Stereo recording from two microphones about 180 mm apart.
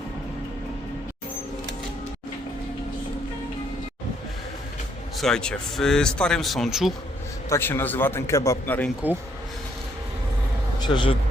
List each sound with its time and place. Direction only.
5.1 s speech: 5° left (ahead or behind)
7.5 s a man's voice: 10° left (ahead or behind)
10.8 s speech: 25° left (ahead or behind)